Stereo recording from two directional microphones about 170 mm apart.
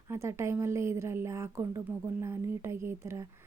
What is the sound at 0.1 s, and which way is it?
A woman's voice, 15° right (ahead or behind).